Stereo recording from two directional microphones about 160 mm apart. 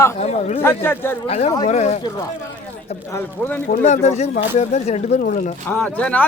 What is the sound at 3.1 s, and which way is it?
Speech, 10° left (ahead or behind).